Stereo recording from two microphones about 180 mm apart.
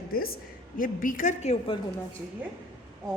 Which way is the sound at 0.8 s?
50° left (ahead or behind).